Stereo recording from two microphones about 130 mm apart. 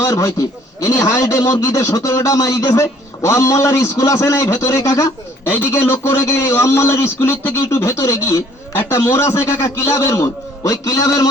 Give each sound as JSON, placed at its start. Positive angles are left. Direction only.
{"t": 0.0, "sound": "a man's voice", "side_deg": 25}